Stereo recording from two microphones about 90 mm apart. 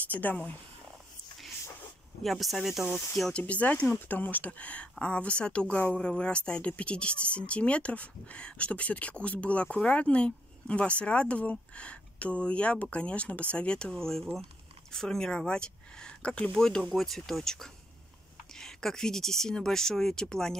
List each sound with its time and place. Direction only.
0.1 s speech: 20° left (ahead or behind)
2.2 s speech: centre (ahead or behind)